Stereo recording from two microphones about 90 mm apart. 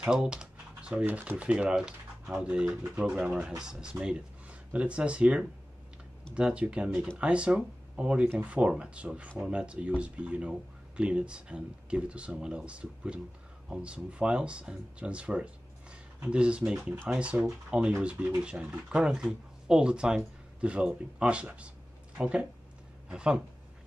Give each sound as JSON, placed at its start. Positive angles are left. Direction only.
{"t": 0.0, "sound": "speech", "side_deg": -10}